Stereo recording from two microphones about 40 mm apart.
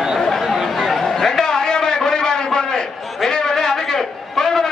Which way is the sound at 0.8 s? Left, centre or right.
Centre.